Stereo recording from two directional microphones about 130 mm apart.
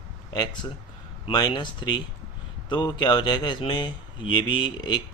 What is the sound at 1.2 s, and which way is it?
Speech, 35° left (ahead or behind).